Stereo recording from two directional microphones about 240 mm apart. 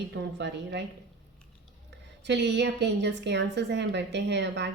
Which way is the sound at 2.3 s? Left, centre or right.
Right.